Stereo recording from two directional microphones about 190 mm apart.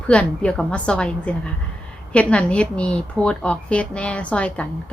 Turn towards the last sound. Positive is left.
turn(degrees=5)  # may be behind; listen again after turning